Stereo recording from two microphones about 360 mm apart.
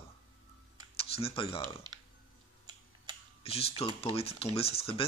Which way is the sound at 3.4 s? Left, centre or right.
Centre.